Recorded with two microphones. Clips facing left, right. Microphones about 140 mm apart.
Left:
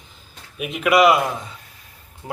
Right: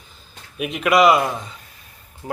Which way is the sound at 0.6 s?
Centre (ahead or behind).